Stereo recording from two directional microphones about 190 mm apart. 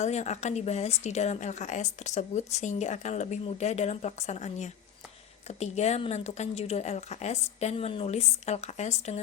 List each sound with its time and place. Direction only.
0.0 s a woman's voice: 35° left (ahead or behind)